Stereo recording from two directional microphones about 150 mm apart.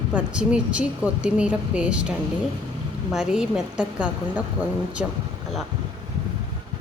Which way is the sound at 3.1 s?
5° right (ahead or behind).